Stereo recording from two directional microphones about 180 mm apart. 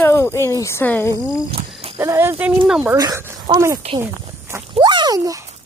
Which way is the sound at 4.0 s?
15° right (ahead or behind).